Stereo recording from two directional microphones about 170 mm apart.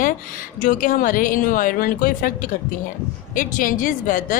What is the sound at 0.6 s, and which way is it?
Speech, 50° left (ahead or behind).